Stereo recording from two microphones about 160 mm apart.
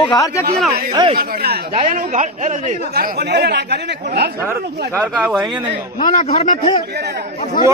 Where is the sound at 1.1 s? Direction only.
70° right (ahead or behind).